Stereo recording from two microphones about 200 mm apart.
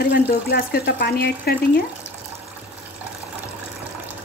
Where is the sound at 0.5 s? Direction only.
50° left (ahead or behind).